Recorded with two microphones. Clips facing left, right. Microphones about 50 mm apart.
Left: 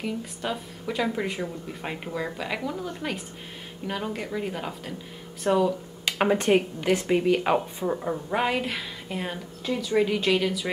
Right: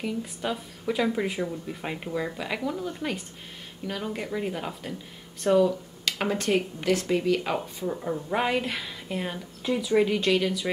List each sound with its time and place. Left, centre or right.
0.0 s speech: centre
4.1 s speech: centre
6.0 s speech: left
8.3 s speech: centre